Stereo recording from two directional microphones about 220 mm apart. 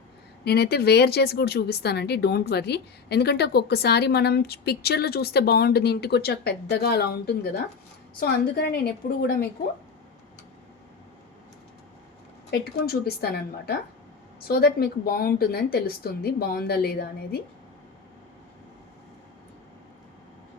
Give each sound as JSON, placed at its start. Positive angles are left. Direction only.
{"t": 0.4, "sound": "a woman's voice", "side_deg": 45}
{"t": 12.5, "sound": "a woman's voice", "side_deg": 45}